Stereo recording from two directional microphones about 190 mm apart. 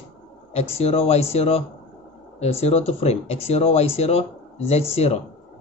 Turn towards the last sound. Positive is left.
turn(degrees=35)  # may be behind; listen again after turning